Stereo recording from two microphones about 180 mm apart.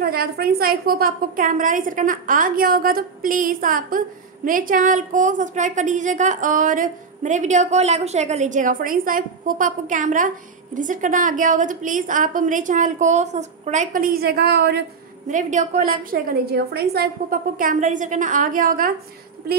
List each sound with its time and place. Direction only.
0.0 s a woman's voice: 60° right (ahead or behind)
15.3 s a woman's voice: 40° right (ahead or behind)